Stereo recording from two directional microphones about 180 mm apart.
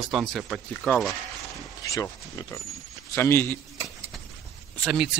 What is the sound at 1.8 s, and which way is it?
Speech, 20° left (ahead or behind).